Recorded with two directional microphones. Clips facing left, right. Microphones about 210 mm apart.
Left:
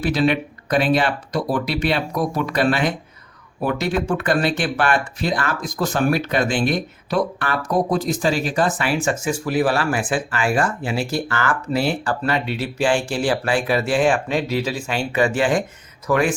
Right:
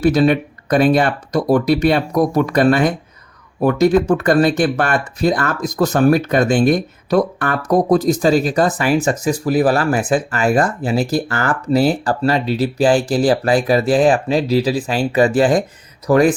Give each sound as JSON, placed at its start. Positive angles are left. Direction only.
{"t": 0.0, "sound": "speech", "side_deg": -45}